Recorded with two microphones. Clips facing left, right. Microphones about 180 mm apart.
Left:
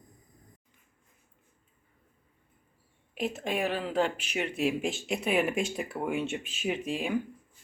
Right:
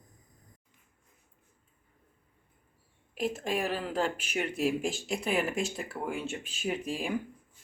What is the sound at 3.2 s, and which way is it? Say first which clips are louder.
Speech: even; centre (ahead or behind).